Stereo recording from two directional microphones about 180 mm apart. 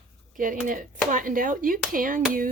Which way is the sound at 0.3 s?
50° right (ahead or behind).